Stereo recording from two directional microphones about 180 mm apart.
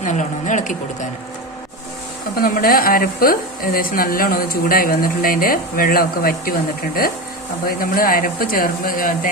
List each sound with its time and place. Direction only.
0.0 s speech: 45° left (ahead or behind)
2.4 s speech: 55° left (ahead or behind)
7.8 s speech: 50° left (ahead or behind)